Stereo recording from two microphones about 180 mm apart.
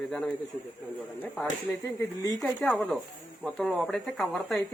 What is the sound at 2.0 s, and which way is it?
Speech, 20° left (ahead or behind).